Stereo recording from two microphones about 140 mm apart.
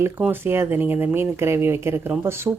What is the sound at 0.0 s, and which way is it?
Speech, 15° right (ahead or behind).